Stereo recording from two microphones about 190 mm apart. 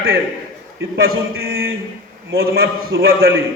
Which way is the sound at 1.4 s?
55° right (ahead or behind).